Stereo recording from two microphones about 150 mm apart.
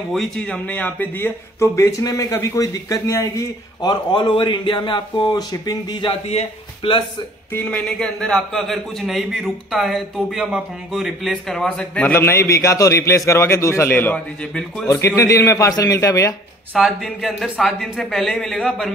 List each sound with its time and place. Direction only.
0.1 s speech: 5° left (ahead or behind); by 7.0 s 40° left (ahead or behind)
7.5 s a man's voice: 10° left (ahead or behind)
14.9 s speech: 20° left (ahead or behind)
16.7 s a man's voice: centre (ahead or behind)